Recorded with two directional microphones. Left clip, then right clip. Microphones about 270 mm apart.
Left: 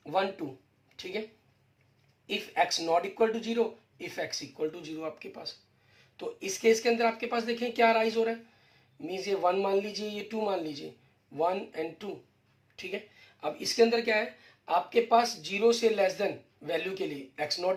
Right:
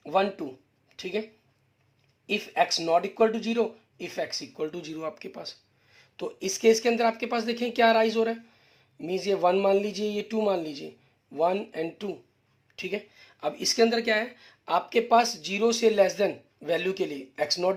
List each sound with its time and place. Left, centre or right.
0.0 s speech: right
2.3 s speech: right